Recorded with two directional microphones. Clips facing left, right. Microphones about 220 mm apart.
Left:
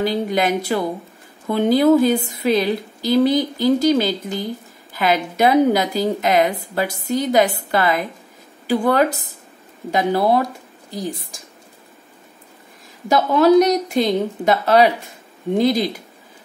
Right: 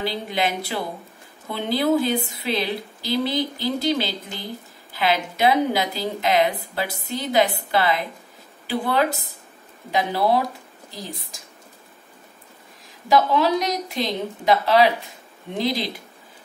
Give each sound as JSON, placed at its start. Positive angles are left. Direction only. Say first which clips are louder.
{"t": 0.0, "sound": "a woman's voice", "louder": "left 6 dB", "side_deg": 45}
{"t": 13.1, "sound": "a woman's voice", "louder": "left 6 dB", "side_deg": 45}